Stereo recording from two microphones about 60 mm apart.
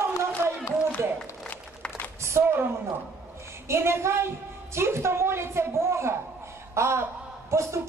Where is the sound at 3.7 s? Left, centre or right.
Right.